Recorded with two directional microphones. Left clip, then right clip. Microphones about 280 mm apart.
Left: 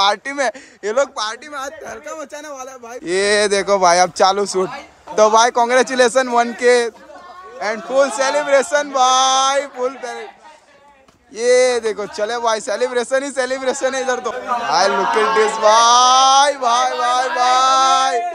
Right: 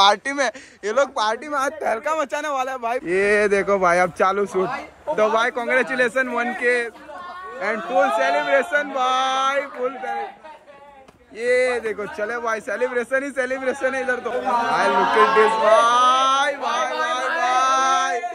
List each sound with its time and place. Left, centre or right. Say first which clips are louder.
0.0 s speech: even; centre
3.1 s speech: left 3 dB; centre
11.3 s speech: left 6 dB; left